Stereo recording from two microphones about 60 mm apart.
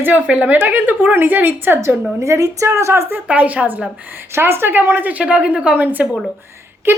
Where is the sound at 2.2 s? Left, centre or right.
Right.